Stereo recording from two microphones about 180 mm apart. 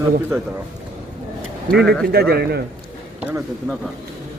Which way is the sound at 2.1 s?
60° right (ahead or behind).